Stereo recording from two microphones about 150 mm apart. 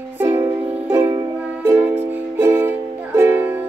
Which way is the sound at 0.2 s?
15° right (ahead or behind).